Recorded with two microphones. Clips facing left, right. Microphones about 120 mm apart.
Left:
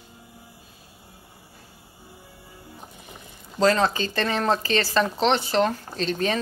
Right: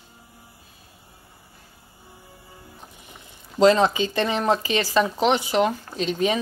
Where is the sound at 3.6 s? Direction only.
20° right (ahead or behind).